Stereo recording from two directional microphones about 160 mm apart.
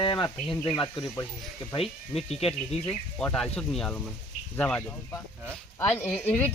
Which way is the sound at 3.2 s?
5° left (ahead or behind).